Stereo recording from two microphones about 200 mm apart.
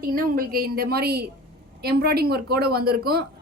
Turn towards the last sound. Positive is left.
turn(degrees=-50)  # may be behind; listen again after turning